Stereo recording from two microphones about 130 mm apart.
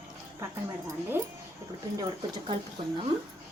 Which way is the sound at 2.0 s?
30° right (ahead or behind).